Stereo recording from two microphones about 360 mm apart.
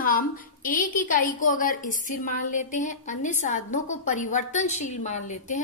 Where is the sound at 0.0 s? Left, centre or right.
Left.